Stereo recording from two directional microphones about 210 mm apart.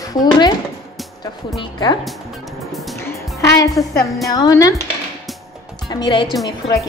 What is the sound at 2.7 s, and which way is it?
Music, centre (ahead or behind).